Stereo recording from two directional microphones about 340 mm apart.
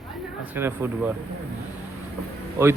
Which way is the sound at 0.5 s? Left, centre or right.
Centre.